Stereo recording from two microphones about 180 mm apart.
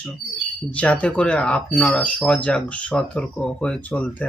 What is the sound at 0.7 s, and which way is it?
Speech, 5° left (ahead or behind).